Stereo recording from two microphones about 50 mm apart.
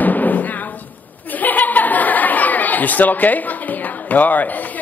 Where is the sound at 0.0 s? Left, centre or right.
Left.